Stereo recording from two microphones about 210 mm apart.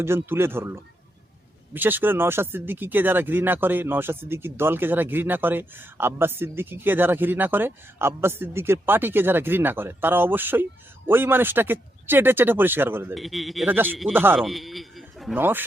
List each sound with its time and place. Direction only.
0.0 s speech: 10° right (ahead or behind)
13.1 s speech: centre (ahead or behind)